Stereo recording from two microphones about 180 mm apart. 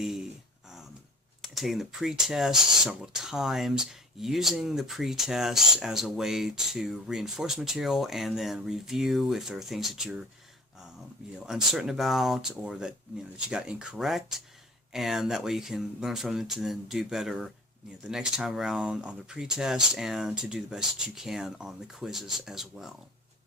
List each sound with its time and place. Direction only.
1.4 s speech: centre (ahead or behind)
11.3 s speech: 5° right (ahead or behind)